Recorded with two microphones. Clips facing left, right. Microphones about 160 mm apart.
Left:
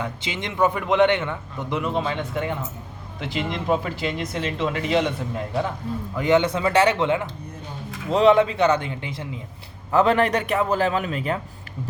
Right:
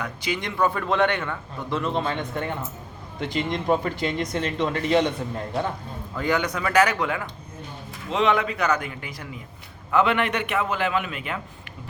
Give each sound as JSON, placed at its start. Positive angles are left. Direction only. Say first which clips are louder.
{"t": 0.0, "sound": "a man's voice", "louder": "right 1 dB", "side_deg": 25}
{"t": 6.1, "sound": "a man's voice", "louder": "left 5 dB", "side_deg": 20}
{"t": 9.9, "sound": "a man's voice", "louder": "left 3 dB", "side_deg": 35}